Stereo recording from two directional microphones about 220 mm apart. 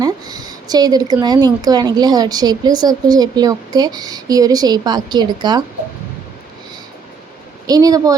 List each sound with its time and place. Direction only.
0.0 s speech: 15° right (ahead or behind)
7.7 s speech: 15° right (ahead or behind)